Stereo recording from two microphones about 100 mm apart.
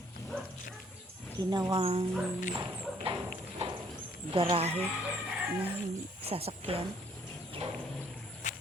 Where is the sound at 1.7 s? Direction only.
60° right (ahead or behind).